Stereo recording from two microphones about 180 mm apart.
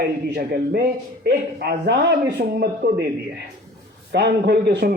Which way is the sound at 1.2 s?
65° right (ahead or behind).